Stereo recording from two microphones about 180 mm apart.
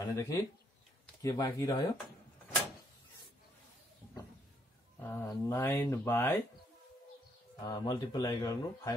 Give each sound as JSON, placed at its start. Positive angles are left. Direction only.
{"t": 0.0, "sound": "speech", "side_deg": 15}
{"t": 5.0, "sound": "speech", "side_deg": 15}
{"t": 7.6, "sound": "speech", "side_deg": 25}